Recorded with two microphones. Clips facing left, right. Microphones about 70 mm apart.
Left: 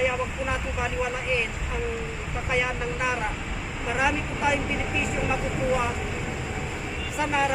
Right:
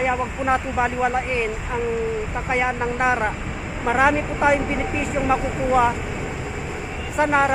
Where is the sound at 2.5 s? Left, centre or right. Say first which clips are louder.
Right 5 dB; right.